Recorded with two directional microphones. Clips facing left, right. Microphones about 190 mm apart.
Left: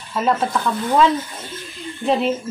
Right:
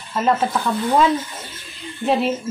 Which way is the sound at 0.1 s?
Centre (ahead or behind).